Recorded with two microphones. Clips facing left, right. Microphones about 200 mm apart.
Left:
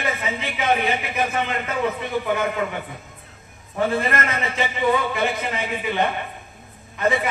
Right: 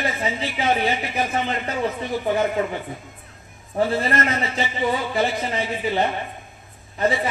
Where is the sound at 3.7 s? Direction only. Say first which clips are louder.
Right 1 dB; 35° right (ahead or behind).